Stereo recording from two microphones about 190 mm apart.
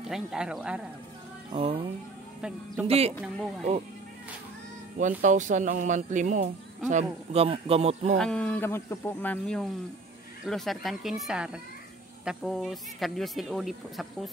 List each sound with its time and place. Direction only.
0.0 s speech: centre (ahead or behind)
1.5 s speech: 30° right (ahead or behind)
2.4 s speech: 5° right (ahead or behind)
2.9 s speech: 30° right (ahead or behind)
4.9 s speech: 40° right (ahead or behind)
8.2 s speech: 5° left (ahead or behind)